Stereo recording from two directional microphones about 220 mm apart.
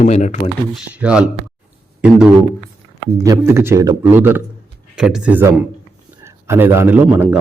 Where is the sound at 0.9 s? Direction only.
5° right (ahead or behind).